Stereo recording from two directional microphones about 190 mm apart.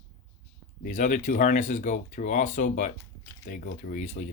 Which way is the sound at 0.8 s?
40° left (ahead or behind).